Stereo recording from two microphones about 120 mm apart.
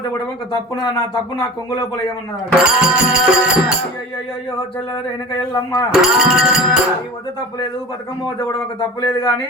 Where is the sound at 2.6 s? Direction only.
5° right (ahead or behind).